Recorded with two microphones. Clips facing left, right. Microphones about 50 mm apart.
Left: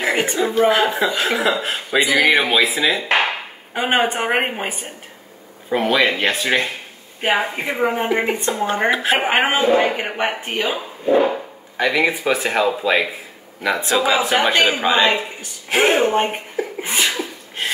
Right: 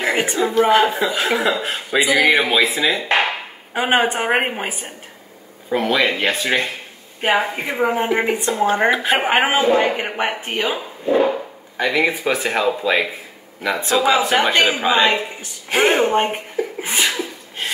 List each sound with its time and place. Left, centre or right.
0.0 s a man's voice: centre
16.8 s sneeze: centre